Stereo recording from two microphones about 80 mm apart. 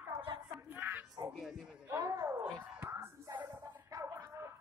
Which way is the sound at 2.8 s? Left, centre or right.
Right.